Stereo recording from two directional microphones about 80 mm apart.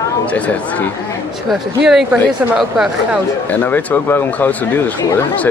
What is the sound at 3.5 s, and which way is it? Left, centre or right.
Speech, left.